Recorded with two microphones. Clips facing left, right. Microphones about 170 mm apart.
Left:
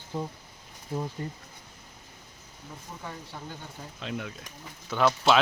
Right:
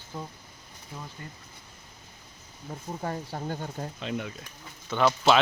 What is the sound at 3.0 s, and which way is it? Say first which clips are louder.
Speech: right 8 dB; 50° right (ahead or behind).